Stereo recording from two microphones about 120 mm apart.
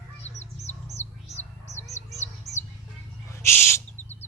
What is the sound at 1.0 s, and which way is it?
Bird, 15° left (ahead or behind).